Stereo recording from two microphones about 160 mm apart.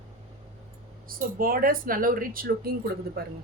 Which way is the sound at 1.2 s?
65° right (ahead or behind).